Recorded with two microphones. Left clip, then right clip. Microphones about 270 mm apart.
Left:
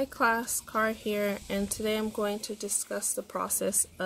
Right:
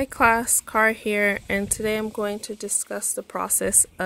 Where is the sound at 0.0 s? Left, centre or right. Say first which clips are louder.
Right 8 dB; right.